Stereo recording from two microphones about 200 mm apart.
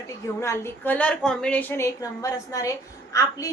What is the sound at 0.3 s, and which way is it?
A woman's voice, 15° left (ahead or behind).